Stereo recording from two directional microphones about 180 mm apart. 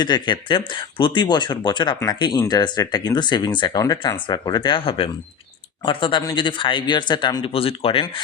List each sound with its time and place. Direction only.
0.0 s speech: 25° left (ahead or behind)